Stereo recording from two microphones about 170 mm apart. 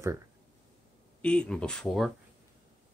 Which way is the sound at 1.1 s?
5° left (ahead or behind).